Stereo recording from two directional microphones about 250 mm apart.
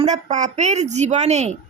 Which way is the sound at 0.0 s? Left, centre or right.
Right.